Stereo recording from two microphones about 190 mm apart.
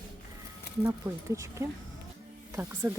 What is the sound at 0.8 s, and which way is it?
Speech, 15° right (ahead or behind).